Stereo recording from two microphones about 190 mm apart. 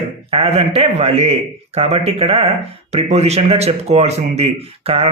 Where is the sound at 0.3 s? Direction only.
30° right (ahead or behind).